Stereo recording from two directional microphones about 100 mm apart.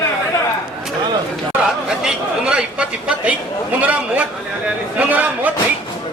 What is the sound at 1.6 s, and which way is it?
A man's voice, 5° right (ahead or behind).